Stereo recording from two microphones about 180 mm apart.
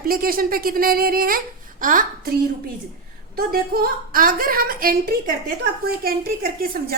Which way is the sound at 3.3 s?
60° right (ahead or behind).